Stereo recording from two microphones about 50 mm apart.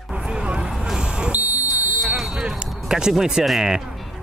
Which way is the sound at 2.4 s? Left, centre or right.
Centre.